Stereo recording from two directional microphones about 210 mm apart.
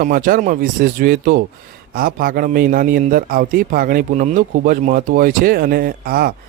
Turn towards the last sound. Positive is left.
turn(degrees=-45)  # may be behind; listen again after turning